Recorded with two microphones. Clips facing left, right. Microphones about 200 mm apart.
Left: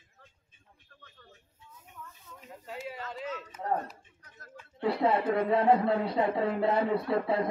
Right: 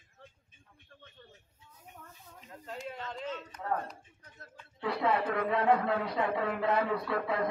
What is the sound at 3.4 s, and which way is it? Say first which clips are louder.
Speech: left 2 dB; 5° left (ahead or behind).